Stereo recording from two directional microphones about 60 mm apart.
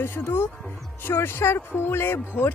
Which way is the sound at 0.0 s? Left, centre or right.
Left.